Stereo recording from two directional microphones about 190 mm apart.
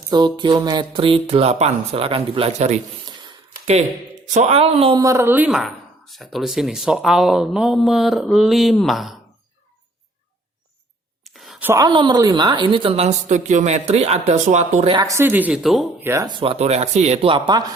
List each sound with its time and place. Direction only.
0.3 s speech: 25° right (ahead or behind)
4.4 s a woman's voice: 35° right (ahead or behind)
5.0 s speech: 15° right (ahead or behind)
11.2 s whispering: centre (ahead or behind)
11.7 s a woman's voice: 20° right (ahead or behind); by 14.9 s 35° right (ahead or behind)
14.9 s a woman's voice: 15° right (ahead or behind); by 16.0 s centre (ahead or behind)
16.0 s speech: 20° right (ahead or behind)